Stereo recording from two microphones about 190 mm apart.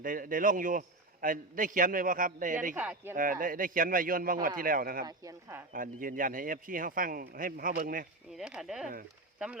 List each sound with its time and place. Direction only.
0.0 s a man's voice: 45° right (ahead or behind)
2.7 s speech: 10° right (ahead or behind)
3.2 s a man's voice: 45° right (ahead or behind)
5.0 s speech: 20° right (ahead or behind)
5.7 s a man's voice: 45° right (ahead or behind)
8.4 s speech: 5° right (ahead or behind)